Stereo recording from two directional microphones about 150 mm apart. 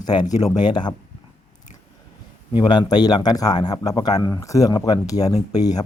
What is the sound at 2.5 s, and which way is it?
Speech, 30° left (ahead or behind).